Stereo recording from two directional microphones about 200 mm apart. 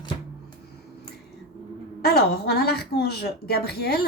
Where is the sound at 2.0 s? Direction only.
50° left (ahead or behind).